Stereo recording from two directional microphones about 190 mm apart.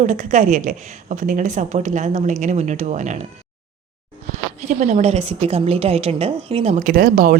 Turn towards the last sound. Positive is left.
turn(degrees=-50)  # may be behind; listen again after turning